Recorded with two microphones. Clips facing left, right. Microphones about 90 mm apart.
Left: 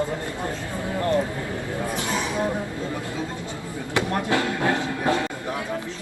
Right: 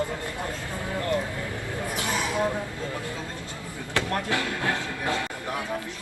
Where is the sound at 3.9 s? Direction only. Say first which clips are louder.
Left 4 dB; 20° left (ahead or behind).